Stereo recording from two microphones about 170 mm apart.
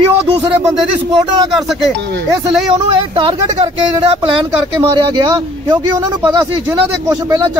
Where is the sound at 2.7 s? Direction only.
30° right (ahead or behind).